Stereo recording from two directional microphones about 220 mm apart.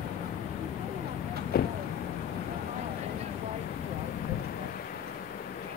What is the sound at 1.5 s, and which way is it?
Speech, 45° left (ahead or behind).